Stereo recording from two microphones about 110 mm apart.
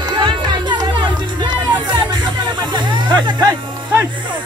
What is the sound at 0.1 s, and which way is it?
Music, 45° right (ahead or behind).